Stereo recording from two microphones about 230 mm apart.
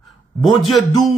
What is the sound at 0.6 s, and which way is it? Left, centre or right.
Speech, centre.